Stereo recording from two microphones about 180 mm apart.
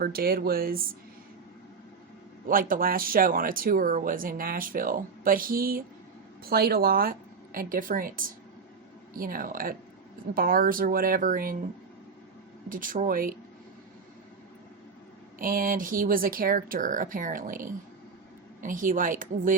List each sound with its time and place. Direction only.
0.0 s speech: 55° right (ahead or behind)
2.5 s speech: 50° right (ahead or behind)
12.6 s speech: 50° right (ahead or behind)
15.4 s speech: 50° right (ahead or behind)